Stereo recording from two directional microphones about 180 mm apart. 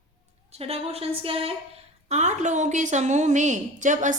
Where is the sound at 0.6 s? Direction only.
35° right (ahead or behind).